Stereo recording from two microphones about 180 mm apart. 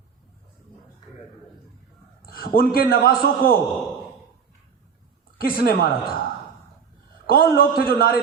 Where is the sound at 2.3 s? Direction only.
55° left (ahead or behind).